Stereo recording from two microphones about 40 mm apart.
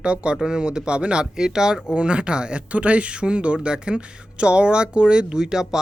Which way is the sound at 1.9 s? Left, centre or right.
Right.